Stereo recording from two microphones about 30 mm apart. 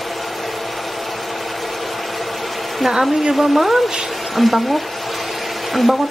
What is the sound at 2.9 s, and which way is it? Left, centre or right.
Speech, centre.